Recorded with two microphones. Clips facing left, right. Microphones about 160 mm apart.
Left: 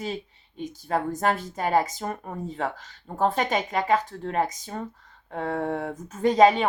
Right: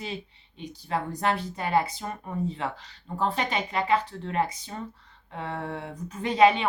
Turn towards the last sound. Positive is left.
turn(degrees=40)  # may be behind; listen again after turning